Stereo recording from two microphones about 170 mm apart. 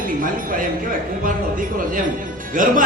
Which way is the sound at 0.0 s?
55° right (ahead or behind).